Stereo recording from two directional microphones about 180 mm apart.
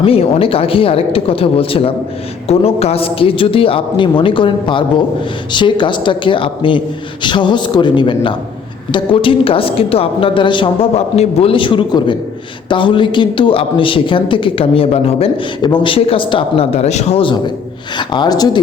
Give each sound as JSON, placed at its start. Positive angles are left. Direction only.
{"t": 0.0, "sound": "a woman's voice", "side_deg": 30}